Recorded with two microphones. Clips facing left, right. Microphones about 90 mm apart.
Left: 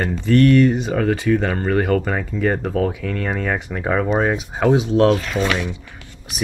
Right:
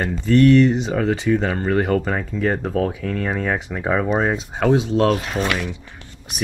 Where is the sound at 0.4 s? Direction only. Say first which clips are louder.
Right 1 dB; 5° left (ahead or behind).